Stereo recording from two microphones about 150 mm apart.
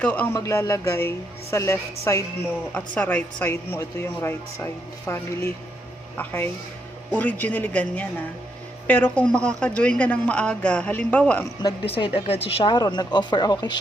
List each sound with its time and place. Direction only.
0.0 s a woman's voice: 10° left (ahead or behind)
11.9 s speech: 35° left (ahead or behind)